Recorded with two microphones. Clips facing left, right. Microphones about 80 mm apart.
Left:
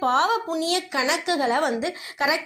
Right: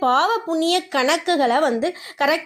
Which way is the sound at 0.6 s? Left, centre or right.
Right.